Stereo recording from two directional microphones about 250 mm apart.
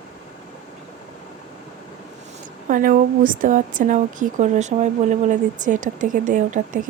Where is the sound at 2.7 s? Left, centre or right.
Right.